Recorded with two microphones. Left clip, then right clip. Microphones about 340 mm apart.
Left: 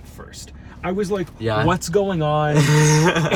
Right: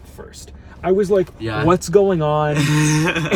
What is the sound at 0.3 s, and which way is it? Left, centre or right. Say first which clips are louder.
Speech: even; centre.